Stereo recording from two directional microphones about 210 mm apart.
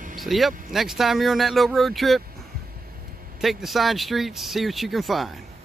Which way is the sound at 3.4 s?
Centre (ahead or behind).